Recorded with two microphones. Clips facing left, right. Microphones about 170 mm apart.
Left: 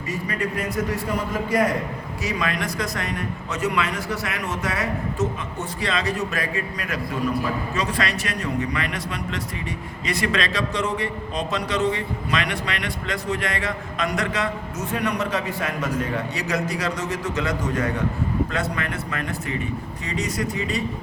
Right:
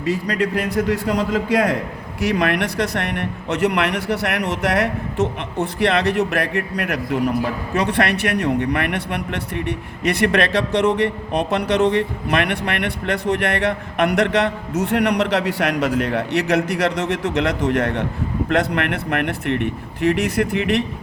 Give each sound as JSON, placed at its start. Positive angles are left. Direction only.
{"t": 0.0, "sound": "a man's voice", "side_deg": -75}